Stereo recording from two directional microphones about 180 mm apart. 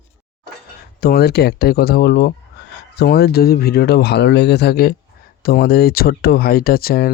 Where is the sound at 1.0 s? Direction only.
60° left (ahead or behind).